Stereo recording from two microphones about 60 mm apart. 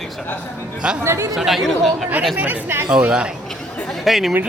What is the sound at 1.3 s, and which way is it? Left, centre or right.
Speech, centre.